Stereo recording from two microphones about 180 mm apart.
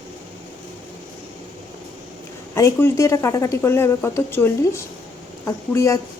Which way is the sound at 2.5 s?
15° left (ahead or behind).